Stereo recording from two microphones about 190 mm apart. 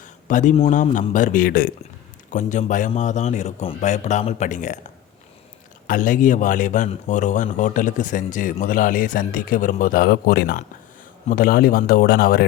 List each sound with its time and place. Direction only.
0.0 s a man's voice: 40° left (ahead or behind)
5.9 s speech: 45° left (ahead or behind)